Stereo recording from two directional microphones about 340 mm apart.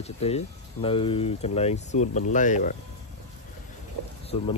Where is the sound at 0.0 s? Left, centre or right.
Centre.